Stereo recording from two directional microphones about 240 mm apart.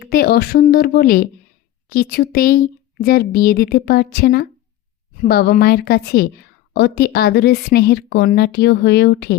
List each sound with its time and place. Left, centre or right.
0.0 s a woman's voice: left